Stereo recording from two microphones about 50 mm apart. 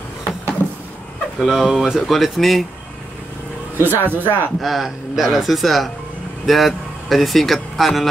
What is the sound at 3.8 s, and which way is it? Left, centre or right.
Speech, right.